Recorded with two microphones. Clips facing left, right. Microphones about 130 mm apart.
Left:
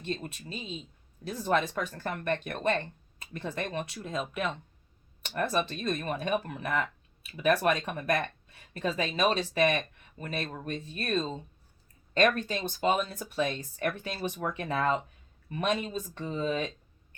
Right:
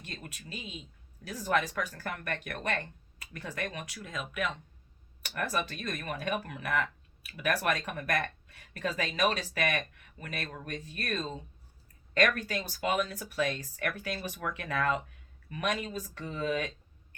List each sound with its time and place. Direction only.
0.0 s speech: 30° left (ahead or behind)